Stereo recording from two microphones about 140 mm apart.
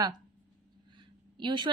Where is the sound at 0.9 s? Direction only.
35° right (ahead or behind).